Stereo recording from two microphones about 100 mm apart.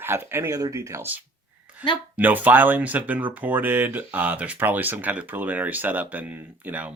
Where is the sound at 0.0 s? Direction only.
25° right (ahead or behind).